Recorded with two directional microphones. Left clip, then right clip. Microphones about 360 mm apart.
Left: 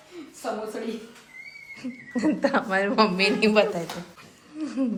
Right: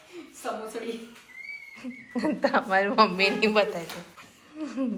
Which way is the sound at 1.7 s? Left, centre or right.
Centre.